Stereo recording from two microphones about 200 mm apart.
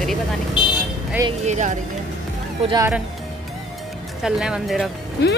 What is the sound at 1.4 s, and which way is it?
Speech, 35° right (ahead or behind).